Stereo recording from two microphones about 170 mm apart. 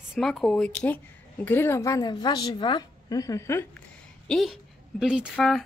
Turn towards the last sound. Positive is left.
turn(degrees=0)  # may be behind; listen again after turning